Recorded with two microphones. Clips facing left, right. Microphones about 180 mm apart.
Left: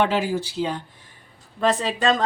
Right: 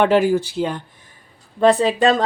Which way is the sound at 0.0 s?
55° right (ahead or behind).